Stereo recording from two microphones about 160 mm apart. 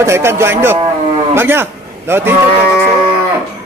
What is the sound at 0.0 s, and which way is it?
A man's voice, 15° right (ahead or behind).